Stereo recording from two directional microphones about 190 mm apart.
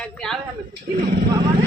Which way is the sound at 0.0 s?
5° left (ahead or behind).